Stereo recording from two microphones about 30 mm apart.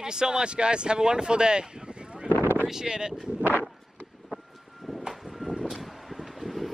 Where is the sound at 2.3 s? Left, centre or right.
Right.